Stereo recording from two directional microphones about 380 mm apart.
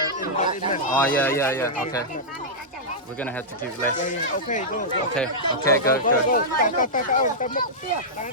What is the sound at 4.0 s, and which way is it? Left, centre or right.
Speech, centre.